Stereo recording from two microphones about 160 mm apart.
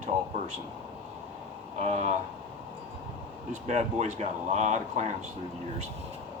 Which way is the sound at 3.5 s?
45° right (ahead or behind).